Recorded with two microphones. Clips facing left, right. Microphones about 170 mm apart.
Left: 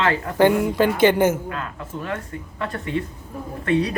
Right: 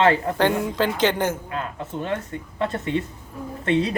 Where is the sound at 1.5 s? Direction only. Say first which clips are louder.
Right 1 dB; 25° right (ahead or behind).